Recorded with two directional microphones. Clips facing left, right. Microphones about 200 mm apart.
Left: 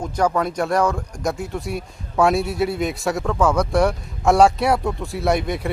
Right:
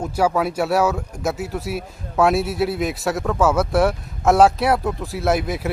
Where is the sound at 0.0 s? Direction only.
5° right (ahead or behind).